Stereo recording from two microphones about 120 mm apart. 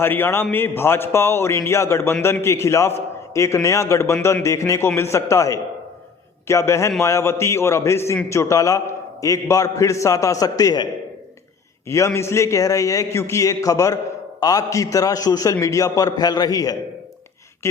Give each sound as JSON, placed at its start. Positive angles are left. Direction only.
{"t": 0.0, "sound": "a man's voice", "side_deg": 15}
{"t": 11.9, "sound": "a man's voice", "side_deg": 25}